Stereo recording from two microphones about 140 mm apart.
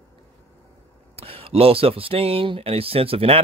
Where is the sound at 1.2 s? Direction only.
45° right (ahead or behind).